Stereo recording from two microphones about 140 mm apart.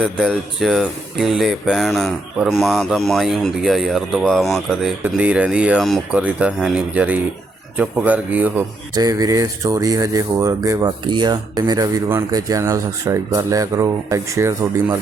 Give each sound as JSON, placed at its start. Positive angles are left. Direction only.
{"t": 0.0, "sound": "speech", "side_deg": 0}
{"t": 9.0, "sound": "speech", "side_deg": -25}